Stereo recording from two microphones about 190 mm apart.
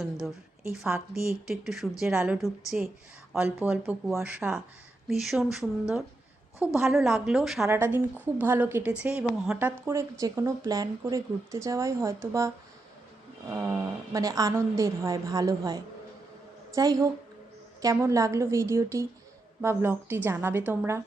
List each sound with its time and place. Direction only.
0.8 s a woman's voice: centre (ahead or behind)
6.7 s a woman's voice: centre (ahead or behind)
13.5 s a woman's voice: 15° right (ahead or behind)